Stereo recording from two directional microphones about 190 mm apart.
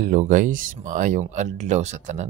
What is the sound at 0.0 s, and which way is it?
Speech, 45° right (ahead or behind).